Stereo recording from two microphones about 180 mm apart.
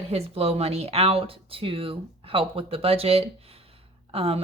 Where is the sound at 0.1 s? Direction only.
35° right (ahead or behind).